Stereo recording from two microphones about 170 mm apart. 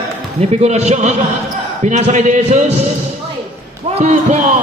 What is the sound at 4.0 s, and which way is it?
Speech, 40° right (ahead or behind).